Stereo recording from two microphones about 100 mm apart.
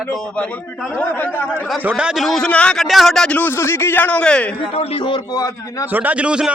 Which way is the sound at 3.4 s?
25° left (ahead or behind).